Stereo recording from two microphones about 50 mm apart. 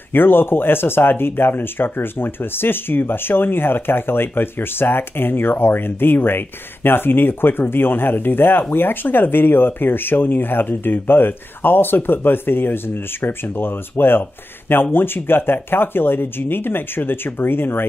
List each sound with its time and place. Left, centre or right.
0.1 s speech: left